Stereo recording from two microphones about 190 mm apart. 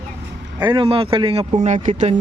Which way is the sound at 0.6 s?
25° right (ahead or behind).